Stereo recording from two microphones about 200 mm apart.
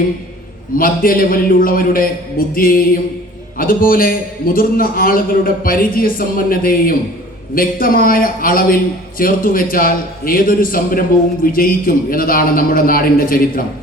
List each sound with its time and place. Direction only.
0.8 s a man's voice: 45° left (ahead or behind)